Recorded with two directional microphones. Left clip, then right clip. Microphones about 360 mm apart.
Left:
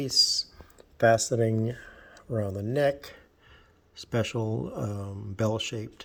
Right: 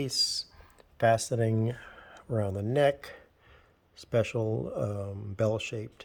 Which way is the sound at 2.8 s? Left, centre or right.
Centre.